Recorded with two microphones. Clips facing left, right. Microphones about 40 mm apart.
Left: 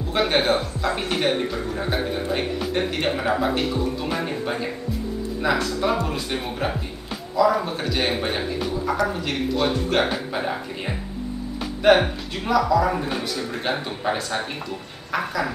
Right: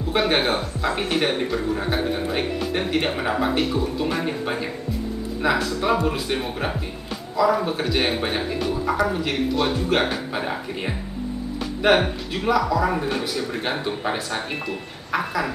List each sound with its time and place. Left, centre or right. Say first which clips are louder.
0.1 s speech: even; centre